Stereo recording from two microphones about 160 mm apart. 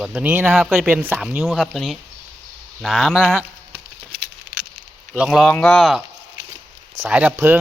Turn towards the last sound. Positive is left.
turn(degrees=-15)  # may be behind; listen again after turning